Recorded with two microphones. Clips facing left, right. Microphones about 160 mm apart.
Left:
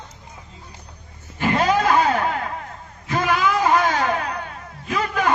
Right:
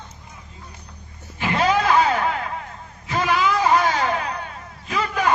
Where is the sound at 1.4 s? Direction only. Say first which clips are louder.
Left 1 dB; 45° left (ahead or behind).